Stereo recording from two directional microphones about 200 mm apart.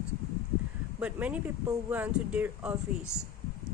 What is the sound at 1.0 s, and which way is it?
Speech, 5° right (ahead or behind).